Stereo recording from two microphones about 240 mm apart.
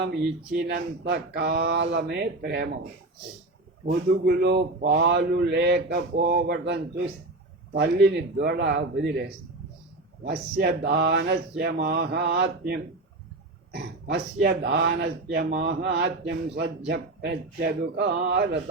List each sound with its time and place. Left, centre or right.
0.0 s speech: right
3.8 s speech: right
10.2 s speech: right
14.1 s speech: right